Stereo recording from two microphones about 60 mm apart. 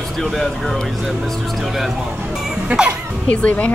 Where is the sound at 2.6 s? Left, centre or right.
Centre.